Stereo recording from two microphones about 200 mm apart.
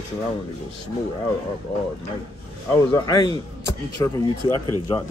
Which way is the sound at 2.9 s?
20° left (ahead or behind).